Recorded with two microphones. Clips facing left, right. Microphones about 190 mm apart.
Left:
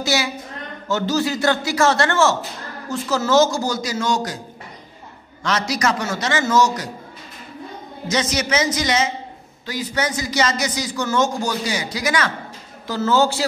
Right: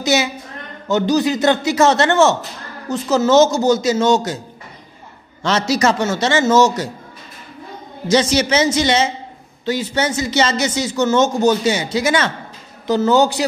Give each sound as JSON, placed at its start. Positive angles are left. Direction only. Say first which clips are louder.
{"t": 0.0, "sound": "a woman's voice", "louder": "right 4 dB", "side_deg": -20}
{"t": 5.4, "sound": "speech", "louder": "right 5 dB", "side_deg": -25}
{"t": 8.1, "sound": "a man's voice", "louder": "right 6 dB", "side_deg": -30}